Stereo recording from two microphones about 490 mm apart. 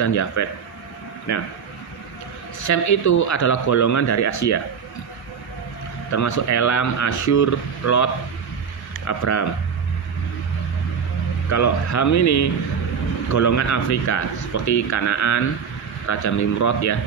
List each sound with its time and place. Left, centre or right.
0.0 s speech: left
2.6 s speech: left
6.1 s speech: left
11.5 s speech: left